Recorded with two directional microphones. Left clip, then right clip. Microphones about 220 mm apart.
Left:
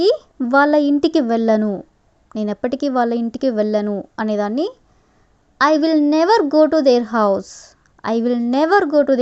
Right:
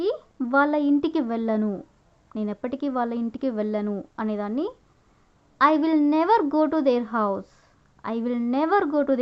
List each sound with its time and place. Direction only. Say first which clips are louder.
0.0 s a woman's voice: left 10 dB; 30° left (ahead or behind)